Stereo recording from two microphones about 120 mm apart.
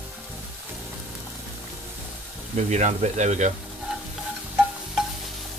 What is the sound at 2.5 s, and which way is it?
Speech, 75° right (ahead or behind).